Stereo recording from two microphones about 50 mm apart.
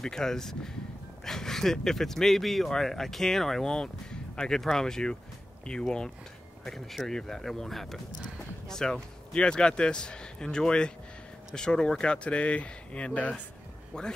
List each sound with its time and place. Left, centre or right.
0.0 s speech: centre